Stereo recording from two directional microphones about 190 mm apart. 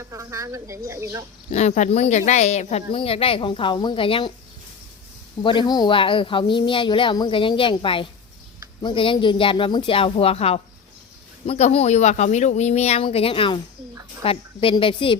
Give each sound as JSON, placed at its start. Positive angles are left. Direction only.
{"t": 0.0, "sound": "speech", "side_deg": -15}
{"t": 1.5, "sound": "speech", "side_deg": 40}
{"t": 5.4, "sound": "speech", "side_deg": 25}